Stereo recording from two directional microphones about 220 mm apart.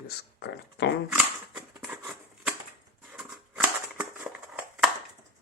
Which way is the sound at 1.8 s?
5° right (ahead or behind).